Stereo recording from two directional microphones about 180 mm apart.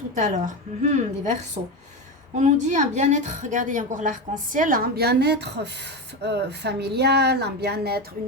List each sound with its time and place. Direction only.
0.2 s a woman's voice: 45° right (ahead or behind); by 8.0 s 65° right (ahead or behind)